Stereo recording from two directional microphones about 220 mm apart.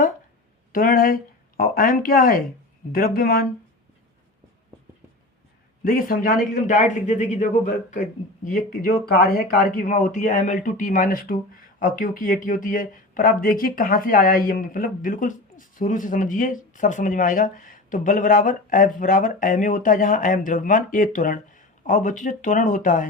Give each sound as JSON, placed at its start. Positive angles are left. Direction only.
{"t": 0.7, "sound": "speech", "side_deg": 40}
{"t": 5.8, "sound": "speech", "side_deg": 40}